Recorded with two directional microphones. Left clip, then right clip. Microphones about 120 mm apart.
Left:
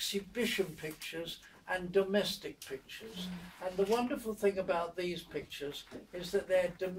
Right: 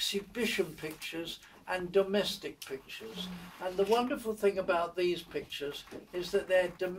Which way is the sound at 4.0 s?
25° left (ahead or behind).